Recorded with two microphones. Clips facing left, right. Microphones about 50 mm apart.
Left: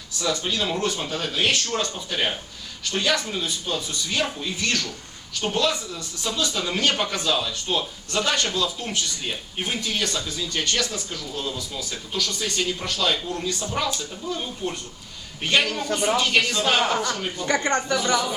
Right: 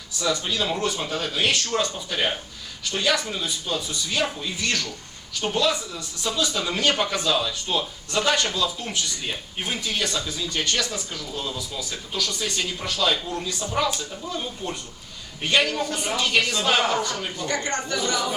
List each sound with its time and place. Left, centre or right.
0.2 s a man's voice: centre
17.4 s speech: left